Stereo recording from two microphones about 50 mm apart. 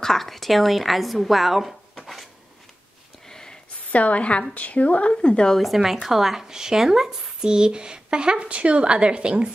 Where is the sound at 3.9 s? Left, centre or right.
Left.